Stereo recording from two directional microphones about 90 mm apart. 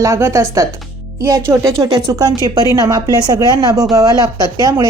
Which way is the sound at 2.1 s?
45° right (ahead or behind).